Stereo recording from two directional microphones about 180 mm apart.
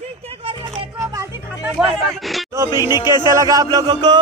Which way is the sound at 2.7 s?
20° left (ahead or behind).